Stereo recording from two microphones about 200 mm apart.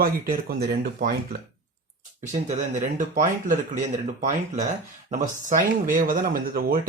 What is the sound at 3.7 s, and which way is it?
Speech, 35° right (ahead or behind).